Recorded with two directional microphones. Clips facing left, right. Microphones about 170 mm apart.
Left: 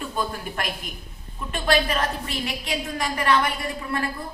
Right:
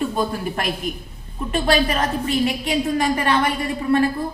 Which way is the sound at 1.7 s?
20° right (ahead or behind).